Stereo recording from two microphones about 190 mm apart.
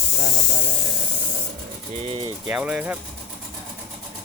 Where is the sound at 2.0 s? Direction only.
25° right (ahead or behind).